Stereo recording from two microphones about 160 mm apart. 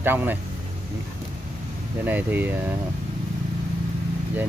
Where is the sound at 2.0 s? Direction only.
10° right (ahead or behind).